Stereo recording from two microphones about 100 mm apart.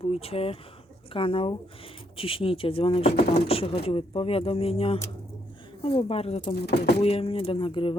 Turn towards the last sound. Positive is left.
turn(degrees=55)  # may be behind; listen again after turning